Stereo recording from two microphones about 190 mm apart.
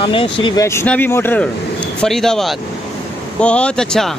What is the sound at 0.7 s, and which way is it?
A man's voice, 10° left (ahead or behind).